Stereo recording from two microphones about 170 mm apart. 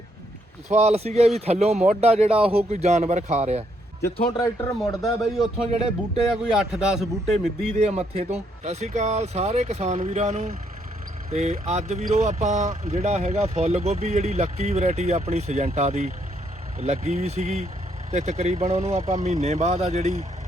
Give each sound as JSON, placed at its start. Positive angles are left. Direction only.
{"t": 0.7, "sound": "speech", "side_deg": -40}
{"t": 4.8, "sound": "a man's voice", "side_deg": 0}
{"t": 7.8, "sound": "speech", "side_deg": -40}